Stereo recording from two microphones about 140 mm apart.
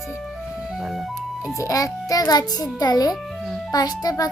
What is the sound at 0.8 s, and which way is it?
Music, centre (ahead or behind).